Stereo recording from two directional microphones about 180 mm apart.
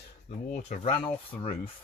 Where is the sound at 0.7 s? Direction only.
40° left (ahead or behind).